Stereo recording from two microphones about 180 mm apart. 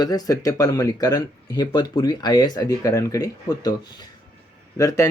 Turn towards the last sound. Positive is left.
turn(degrees=15)  # may be behind; listen again after turning